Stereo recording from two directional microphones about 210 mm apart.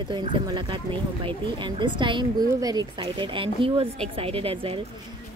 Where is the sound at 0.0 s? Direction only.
20° right (ahead or behind).